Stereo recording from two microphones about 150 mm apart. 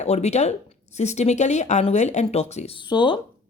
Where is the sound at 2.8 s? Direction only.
30° left (ahead or behind).